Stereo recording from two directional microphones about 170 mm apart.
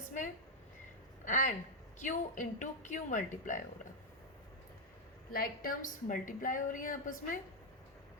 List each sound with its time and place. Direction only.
1.2 s a woman's voice: 50° left (ahead or behind)
5.3 s a woman's voice: 60° left (ahead or behind)